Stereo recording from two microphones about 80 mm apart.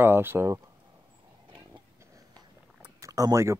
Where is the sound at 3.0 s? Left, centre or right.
Right.